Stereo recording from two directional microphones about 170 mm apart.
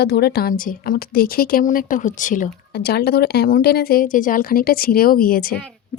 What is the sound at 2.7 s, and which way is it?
A woman's voice, 70° left (ahead or behind).